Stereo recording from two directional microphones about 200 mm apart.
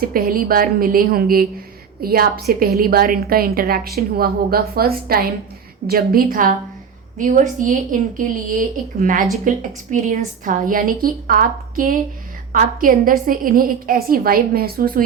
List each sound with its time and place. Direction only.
0.0 s a woman's voice: 45° right (ahead or behind)